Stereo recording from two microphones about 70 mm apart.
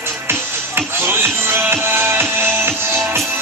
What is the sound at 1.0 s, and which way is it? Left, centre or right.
Music, right.